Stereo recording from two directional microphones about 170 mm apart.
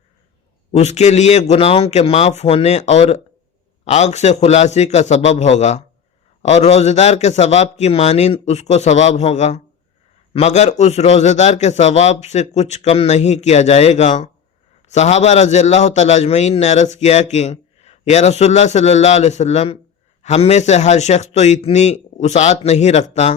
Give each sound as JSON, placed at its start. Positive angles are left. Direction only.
{"t": 0.7, "sound": "a man's voice", "side_deg": 40}